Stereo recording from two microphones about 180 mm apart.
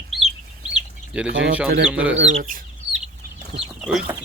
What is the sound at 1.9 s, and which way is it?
Speech, 5° right (ahead or behind).